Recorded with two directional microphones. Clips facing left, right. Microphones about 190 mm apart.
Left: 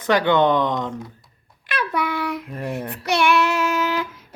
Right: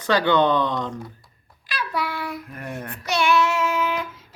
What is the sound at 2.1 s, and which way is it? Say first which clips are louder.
Child singing: left 5 dB; 80° left.